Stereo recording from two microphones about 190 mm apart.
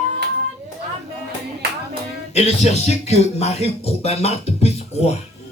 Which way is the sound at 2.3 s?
35° left (ahead or behind).